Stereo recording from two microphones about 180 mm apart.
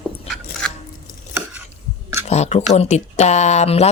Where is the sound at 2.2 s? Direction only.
40° left (ahead or behind).